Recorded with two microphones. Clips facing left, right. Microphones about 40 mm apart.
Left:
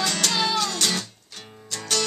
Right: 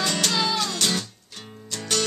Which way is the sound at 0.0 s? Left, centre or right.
Centre.